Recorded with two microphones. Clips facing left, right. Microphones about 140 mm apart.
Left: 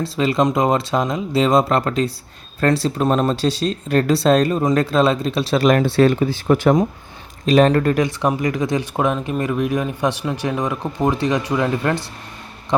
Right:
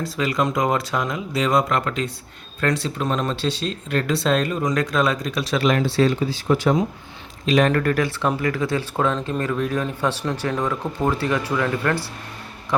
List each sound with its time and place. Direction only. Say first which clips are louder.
0.0 s speech: left 5 dB; 25° left (ahead or behind)
5.6 s speech: left 4 dB; 50° left (ahead or behind)
7.4 s speech: left 4 dB; 35° left (ahead or behind)